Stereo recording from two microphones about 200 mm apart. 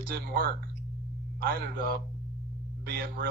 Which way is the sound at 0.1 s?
45° right (ahead or behind).